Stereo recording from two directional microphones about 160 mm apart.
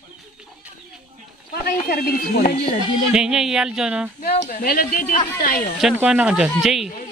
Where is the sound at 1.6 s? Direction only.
65° left (ahead or behind).